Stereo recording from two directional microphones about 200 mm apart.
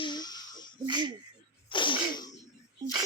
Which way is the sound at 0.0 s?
20° left (ahead or behind).